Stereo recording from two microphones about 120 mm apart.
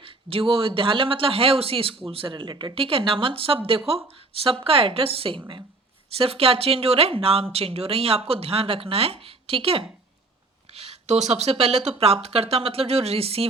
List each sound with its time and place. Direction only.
0.0 s speech: 50° right (ahead or behind)
10.8 s speech: 60° right (ahead or behind)